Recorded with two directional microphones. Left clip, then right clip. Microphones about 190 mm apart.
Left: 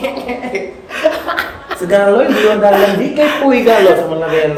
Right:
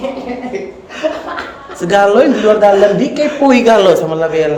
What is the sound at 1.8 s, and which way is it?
Speech, 50° right (ahead or behind).